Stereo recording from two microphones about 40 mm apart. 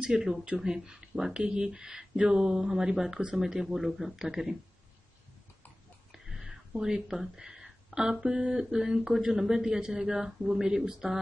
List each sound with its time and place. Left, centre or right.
0.0 s speech: right
1.4 s speech: right
3.2 s speech: right
3.4 s speech: centre
6.1 s speech: centre